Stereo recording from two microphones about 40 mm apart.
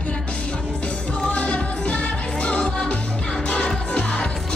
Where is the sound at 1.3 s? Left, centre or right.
Left.